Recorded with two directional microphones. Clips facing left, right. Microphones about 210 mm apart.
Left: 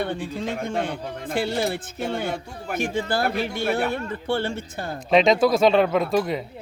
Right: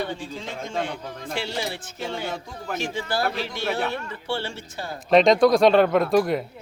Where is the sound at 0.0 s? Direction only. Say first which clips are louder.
Left 3 dB; 55° left (ahead or behind).